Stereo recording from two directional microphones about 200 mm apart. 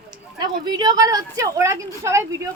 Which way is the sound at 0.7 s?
20° right (ahead or behind).